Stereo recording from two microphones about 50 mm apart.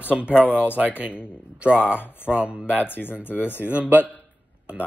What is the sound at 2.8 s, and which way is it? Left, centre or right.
Speech, left.